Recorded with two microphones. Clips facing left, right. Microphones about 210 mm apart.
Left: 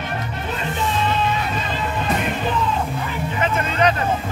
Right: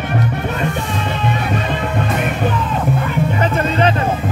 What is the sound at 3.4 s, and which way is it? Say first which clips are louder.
Music: right 1 dB; 35° right (ahead or behind).